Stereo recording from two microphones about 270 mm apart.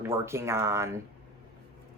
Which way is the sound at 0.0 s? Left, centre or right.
Centre.